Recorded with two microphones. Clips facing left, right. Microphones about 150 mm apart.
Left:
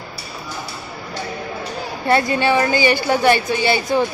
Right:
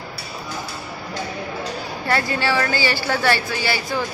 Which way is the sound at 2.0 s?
20° left (ahead or behind).